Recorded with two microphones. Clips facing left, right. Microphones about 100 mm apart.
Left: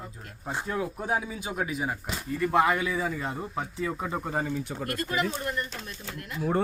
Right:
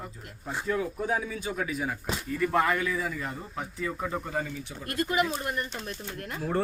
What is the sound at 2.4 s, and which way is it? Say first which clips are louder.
Music: left 2 dB; 10° left (ahead or behind).